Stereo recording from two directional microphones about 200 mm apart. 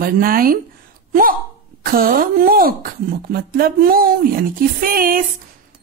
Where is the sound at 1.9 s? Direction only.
45° right (ahead or behind).